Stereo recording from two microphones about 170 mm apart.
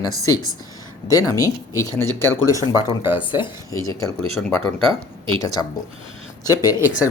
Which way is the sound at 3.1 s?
25° left (ahead or behind).